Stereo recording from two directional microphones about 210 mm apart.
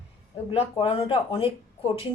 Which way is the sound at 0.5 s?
25° left (ahead or behind).